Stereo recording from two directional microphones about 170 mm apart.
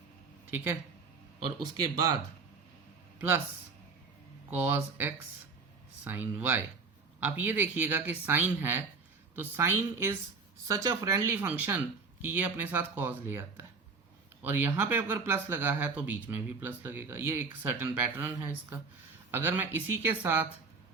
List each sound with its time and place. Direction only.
0.5 s speech: 15° right (ahead or behind)
1.8 s speech: 20° right (ahead or behind)
3.2 s speech: 10° right (ahead or behind)
4.4 s speech: 10° right (ahead or behind)